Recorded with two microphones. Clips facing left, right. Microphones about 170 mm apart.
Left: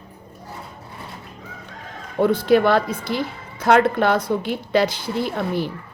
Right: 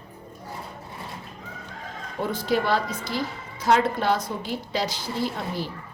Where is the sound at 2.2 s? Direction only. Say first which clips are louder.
Left 9 dB; 60° left (ahead or behind).